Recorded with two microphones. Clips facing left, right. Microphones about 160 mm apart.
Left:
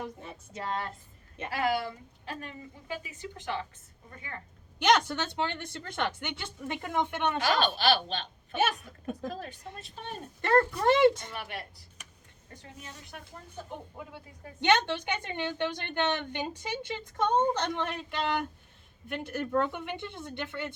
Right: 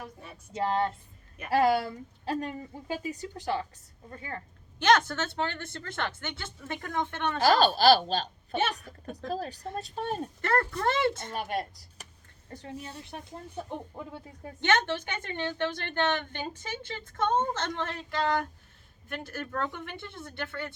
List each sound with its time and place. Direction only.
0.0 s a woman's voice: 25° left (ahead or behind)
0.5 s speech: 30° right (ahead or behind)
4.8 s a woman's voice: 15° left (ahead or behind)
7.4 s speech: 35° right (ahead or behind)
9.3 s speech: 35° right (ahead or behind)
10.4 s a woman's voice: 20° left (ahead or behind)
11.3 s speech: 40° right (ahead or behind)
14.6 s a woman's voice: 15° left (ahead or behind)